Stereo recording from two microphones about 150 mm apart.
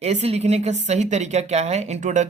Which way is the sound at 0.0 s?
45° right (ahead or behind).